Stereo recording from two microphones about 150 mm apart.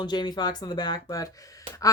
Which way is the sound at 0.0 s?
30° left (ahead or behind).